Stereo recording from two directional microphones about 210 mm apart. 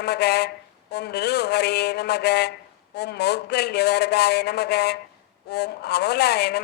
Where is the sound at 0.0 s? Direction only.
50° left (ahead or behind).